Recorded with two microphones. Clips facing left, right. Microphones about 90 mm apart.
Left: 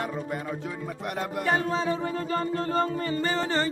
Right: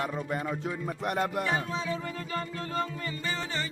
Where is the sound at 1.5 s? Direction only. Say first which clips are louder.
Left 5 dB; 40° left (ahead or behind).